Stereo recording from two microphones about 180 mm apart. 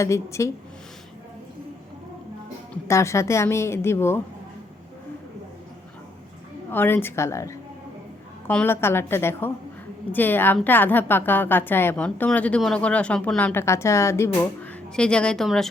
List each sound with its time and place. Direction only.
0.0 s a woman's voice: 15° left (ahead or behind)
2.8 s a woman's voice: 15° left (ahead or behind)
6.7 s a woman's voice: 10° left (ahead or behind)